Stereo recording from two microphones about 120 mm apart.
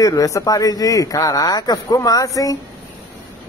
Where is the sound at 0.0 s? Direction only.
30° left (ahead or behind).